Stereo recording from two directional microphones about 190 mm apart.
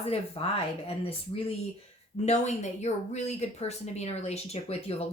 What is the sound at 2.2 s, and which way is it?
A woman's voice, 35° left (ahead or behind).